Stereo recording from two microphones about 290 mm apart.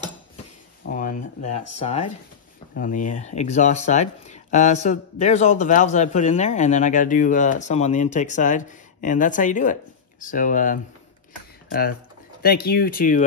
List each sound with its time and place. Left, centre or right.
0.8 s a sound: left
1.8 s speech: left
12.4 s speech: left